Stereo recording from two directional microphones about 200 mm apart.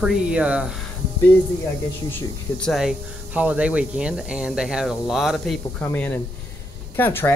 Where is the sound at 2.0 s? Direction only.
10° left (ahead or behind).